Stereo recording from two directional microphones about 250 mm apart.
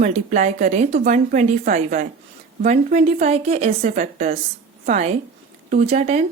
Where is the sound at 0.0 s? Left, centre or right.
Right.